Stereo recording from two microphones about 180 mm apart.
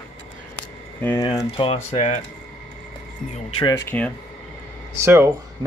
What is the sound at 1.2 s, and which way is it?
Speech, 25° left (ahead or behind).